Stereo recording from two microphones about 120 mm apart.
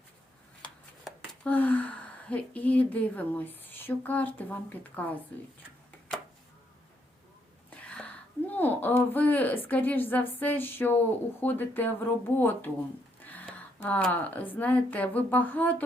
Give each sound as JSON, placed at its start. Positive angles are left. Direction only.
{"t": 1.5, "sound": "a woman's voice", "side_deg": 15}
{"t": 7.9, "sound": "speech", "side_deg": 10}
{"t": 13.2, "sound": "a sound", "side_deg": 15}
{"t": 14.1, "sound": "a woman's voice", "side_deg": 15}